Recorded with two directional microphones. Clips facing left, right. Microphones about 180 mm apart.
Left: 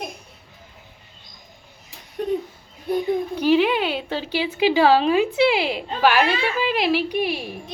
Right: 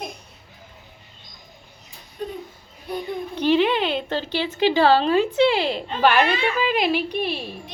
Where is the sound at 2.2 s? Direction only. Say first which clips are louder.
Left 6 dB; 70° left (ahead or behind).